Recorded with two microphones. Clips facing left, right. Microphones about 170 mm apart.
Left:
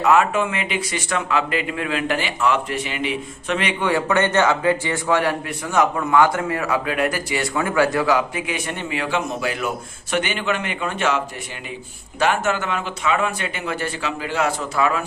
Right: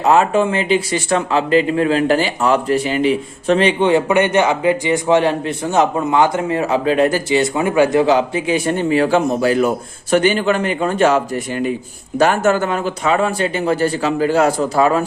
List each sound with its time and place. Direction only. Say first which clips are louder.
0.0 s speech: right 4 dB; 30° right (ahead or behind)
12.2 s speech: right 6 dB; 40° right (ahead or behind)